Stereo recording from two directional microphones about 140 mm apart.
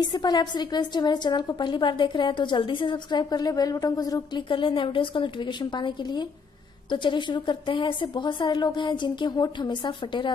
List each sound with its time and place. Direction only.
0.0 s a woman's voice: 30° left (ahead or behind)